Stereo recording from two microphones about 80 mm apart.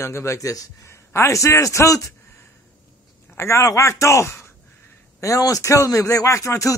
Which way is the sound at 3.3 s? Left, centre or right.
Left.